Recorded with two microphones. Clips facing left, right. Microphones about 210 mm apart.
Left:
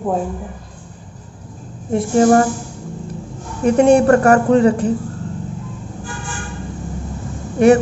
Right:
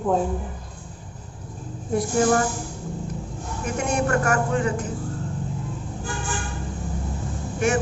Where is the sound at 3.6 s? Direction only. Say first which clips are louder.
Left 14 dB; 30° left (ahead or behind).